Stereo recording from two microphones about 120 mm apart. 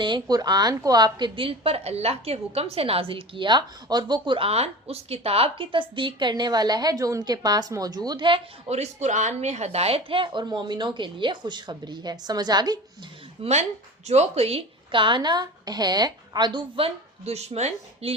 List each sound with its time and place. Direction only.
0.0 s a woman's voice: 35° right (ahead or behind)
8.8 s speech: 75° right (ahead or behind); by 12.8 s 35° right (ahead or behind)
13.4 s a woman's voice: 65° right (ahead or behind)